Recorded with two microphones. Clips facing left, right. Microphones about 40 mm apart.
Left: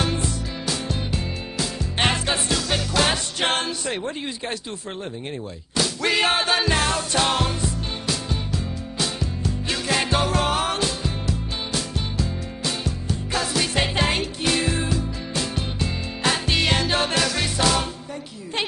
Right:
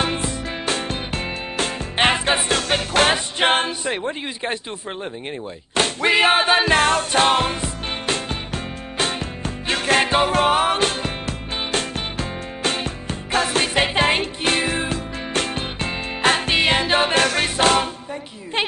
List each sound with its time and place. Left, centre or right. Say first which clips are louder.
0.0 s music: right 2 dB; right
2.0 s music: right 4 dB; right
2.2 s music: right 4 dB; right
3.3 s a sound: right 5 dB; right
6.0 s music: right 5 dB; right
6.6 s music: right 5 dB; right
10.5 s music: right 5 dB; right
10.8 s music: right 4 dB; right
16.5 s music: right 4 dB; right
17.1 s music: right 4 dB; right